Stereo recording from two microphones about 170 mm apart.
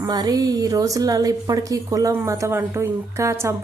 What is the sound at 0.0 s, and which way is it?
A woman's voice, 20° right (ahead or behind).